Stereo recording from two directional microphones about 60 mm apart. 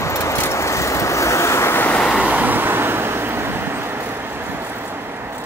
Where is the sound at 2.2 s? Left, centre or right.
Right.